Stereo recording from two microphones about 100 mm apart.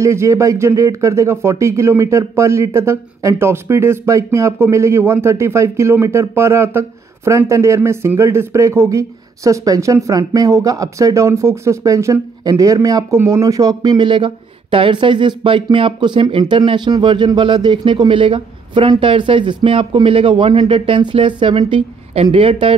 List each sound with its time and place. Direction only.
0.0 s speech: 30° right (ahead or behind); by 22.8 s 60° right (ahead or behind)